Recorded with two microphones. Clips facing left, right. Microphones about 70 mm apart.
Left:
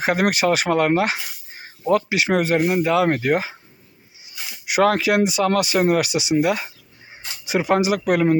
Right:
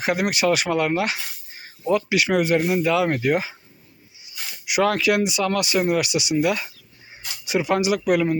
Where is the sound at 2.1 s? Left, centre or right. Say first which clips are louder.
Even; left.